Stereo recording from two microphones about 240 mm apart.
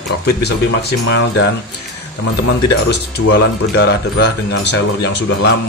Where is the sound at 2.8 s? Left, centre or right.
Left.